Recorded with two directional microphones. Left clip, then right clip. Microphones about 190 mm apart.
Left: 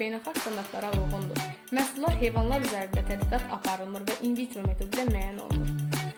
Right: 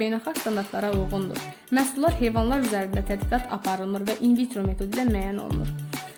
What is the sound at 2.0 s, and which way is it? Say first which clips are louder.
Speech: right 5 dB; 50° right (ahead or behind).